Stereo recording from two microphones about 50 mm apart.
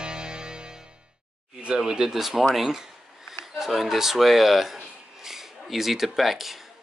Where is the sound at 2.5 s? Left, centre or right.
Centre.